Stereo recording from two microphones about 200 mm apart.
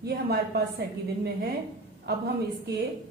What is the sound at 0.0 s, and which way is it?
Speech, 50° right (ahead or behind).